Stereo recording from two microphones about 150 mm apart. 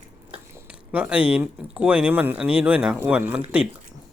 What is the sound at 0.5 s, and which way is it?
Speech, 10° right (ahead or behind).